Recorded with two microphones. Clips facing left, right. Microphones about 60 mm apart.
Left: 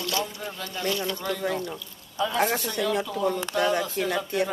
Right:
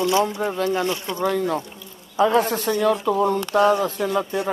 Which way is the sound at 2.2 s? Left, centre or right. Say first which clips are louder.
Right 5 dB; right.